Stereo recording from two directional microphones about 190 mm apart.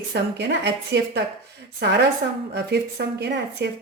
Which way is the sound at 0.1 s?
65° right (ahead or behind).